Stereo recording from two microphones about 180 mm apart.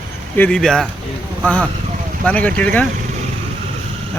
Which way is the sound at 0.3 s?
5° left (ahead or behind).